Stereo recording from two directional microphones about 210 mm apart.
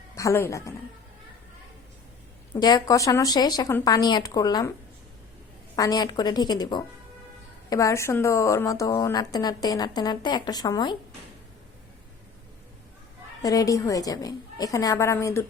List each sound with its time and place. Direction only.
0.2 s a woman's voice: 15° left (ahead or behind)
2.6 s a woman's voice: 20° left (ahead or behind)
5.7 s a woman's voice: 15° left (ahead or behind)
13.4 s a woman's voice: 15° left (ahead or behind)